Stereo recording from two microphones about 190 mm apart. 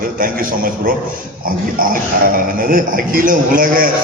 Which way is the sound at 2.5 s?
45° right (ahead or behind).